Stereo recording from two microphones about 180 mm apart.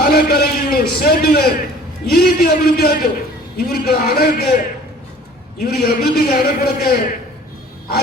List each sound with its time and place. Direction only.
0.0 s a man's voice: 55° left (ahead or behind)
5.5 s a man's voice: 60° left (ahead or behind)